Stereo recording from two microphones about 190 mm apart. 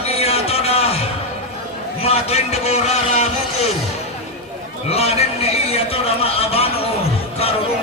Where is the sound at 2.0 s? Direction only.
35° left (ahead or behind).